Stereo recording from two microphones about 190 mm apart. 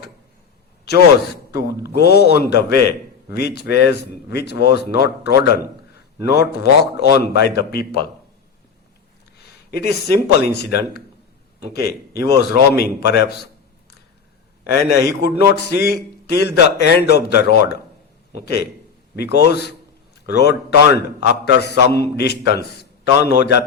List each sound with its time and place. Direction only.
0.9 s a man's voice: 60° left (ahead or behind)
9.7 s a man's voice: 55° left (ahead or behind)
14.9 s a man's voice: 55° left (ahead or behind)